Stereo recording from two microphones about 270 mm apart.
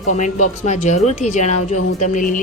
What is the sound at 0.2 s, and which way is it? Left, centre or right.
A woman's voice, left.